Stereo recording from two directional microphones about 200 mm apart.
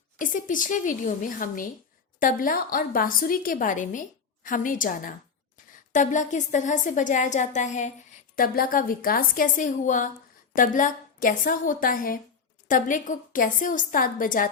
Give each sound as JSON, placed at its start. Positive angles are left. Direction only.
{"t": 0.2, "sound": "a woman's voice", "side_deg": 40}